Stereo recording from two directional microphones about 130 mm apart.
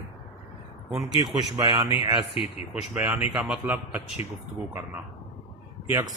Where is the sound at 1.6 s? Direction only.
35° right (ahead or behind).